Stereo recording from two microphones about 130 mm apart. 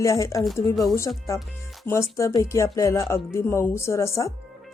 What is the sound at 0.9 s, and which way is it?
Speech, 25° left (ahead or behind).